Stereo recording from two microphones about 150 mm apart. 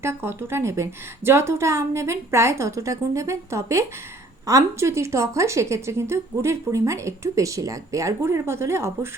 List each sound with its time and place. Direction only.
0.0 s speech: 15° right (ahead or behind)